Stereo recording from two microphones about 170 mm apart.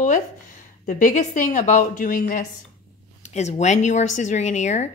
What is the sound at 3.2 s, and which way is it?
Speech, 40° left (ahead or behind).